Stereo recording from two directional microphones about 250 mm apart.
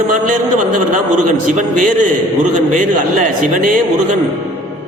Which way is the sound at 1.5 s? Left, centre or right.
Right.